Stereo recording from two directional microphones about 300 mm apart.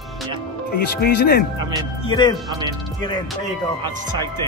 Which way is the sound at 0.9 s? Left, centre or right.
Left.